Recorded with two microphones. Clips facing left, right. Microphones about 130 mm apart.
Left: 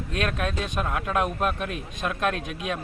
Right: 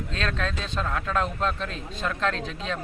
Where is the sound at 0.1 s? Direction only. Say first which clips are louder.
Left 3 dB; 15° left (ahead or behind).